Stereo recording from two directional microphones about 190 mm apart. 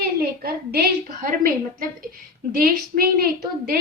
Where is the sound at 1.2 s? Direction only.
45° right (ahead or behind).